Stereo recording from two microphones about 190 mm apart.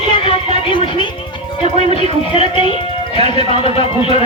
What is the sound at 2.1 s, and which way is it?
Speech, 30° left (ahead or behind).